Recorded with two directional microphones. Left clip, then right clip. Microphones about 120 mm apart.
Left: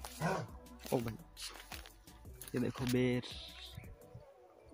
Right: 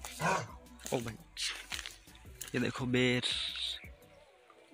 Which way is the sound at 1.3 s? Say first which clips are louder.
Right 11 dB; 40° left (ahead or behind).